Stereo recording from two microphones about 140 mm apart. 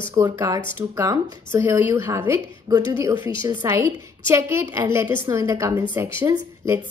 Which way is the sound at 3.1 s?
35° left (ahead or behind).